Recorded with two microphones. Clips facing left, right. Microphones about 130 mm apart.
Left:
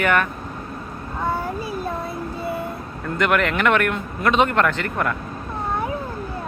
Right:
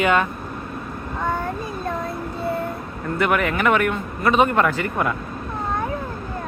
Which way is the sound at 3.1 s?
5° right (ahead or behind).